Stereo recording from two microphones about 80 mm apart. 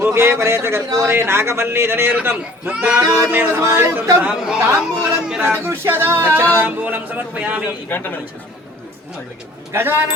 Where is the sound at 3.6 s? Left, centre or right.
Right.